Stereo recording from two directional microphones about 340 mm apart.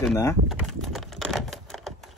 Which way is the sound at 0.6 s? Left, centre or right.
Centre.